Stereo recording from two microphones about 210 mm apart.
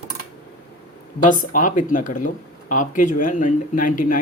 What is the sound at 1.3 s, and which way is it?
Speech, 40° left (ahead or behind).